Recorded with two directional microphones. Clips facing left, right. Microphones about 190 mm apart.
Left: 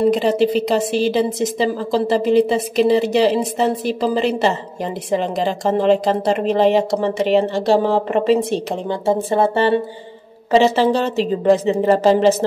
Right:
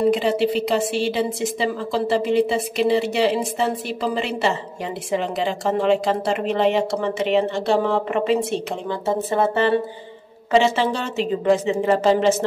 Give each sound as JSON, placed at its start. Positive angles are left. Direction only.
{"t": 0.1, "sound": "speech", "side_deg": 40}